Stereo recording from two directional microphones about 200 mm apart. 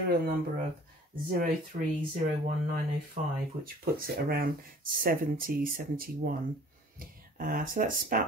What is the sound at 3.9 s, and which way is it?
Speech, 50° right (ahead or behind).